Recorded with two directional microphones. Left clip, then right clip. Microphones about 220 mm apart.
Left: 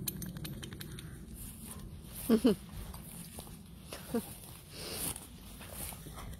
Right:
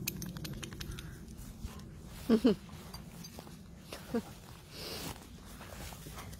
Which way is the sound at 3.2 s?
Centre (ahead or behind).